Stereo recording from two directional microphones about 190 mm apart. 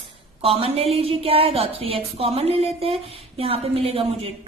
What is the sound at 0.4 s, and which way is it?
A woman's voice, 30° right (ahead or behind).